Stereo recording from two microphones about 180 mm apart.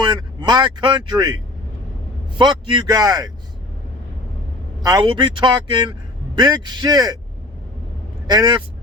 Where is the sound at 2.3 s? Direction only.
25° right (ahead or behind).